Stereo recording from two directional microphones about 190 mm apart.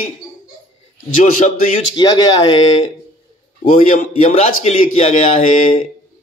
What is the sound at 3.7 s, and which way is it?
A man's voice, 45° left (ahead or behind).